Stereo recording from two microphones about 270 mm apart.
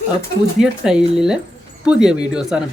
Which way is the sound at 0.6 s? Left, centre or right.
Centre.